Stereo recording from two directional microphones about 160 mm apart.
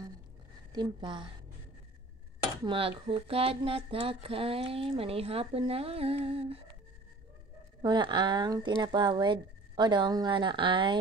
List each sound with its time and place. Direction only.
0.7 s speech: 30° right (ahead or behind)
2.6 s speech: 35° right (ahead or behind)
7.8 s speech: 30° right (ahead or behind)